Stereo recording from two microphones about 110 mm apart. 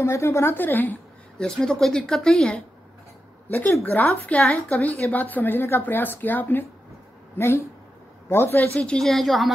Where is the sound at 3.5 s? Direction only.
20° left (ahead or behind).